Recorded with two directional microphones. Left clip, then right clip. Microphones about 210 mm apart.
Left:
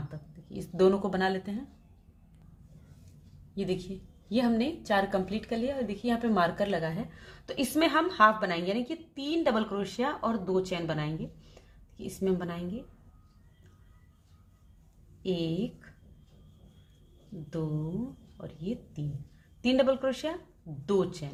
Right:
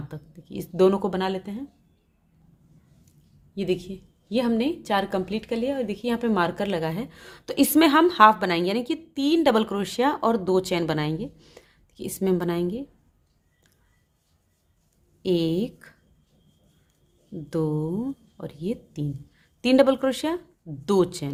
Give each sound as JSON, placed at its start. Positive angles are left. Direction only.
{"t": 0.1, "sound": "speech", "side_deg": -35}
{"t": 3.5, "sound": "a woman's voice", "side_deg": -35}
{"t": 11.5, "sound": "a sound", "side_deg": -45}
{"t": 15.2, "sound": "a woman's voice", "side_deg": -45}
{"t": 18.3, "sound": "a woman's voice", "side_deg": -45}